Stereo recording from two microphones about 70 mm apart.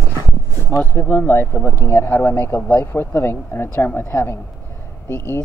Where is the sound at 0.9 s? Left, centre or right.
Left.